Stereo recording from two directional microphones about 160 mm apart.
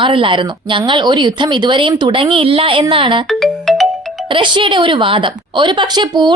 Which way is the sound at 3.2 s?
Centre (ahead or behind).